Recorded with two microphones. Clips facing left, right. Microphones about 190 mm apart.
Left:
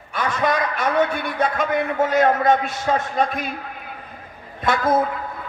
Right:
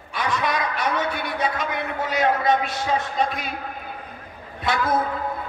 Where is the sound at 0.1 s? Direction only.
50° left (ahead or behind).